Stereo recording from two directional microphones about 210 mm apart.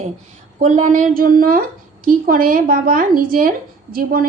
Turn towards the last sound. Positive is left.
turn(degrees=-45)  # may be behind; listen again after turning